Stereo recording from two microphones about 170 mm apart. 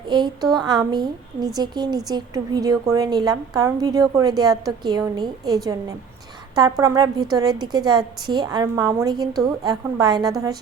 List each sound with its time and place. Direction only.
0.5 s a woman's voice: 25° right (ahead or behind)
6.6 s a woman's voice: 20° right (ahead or behind)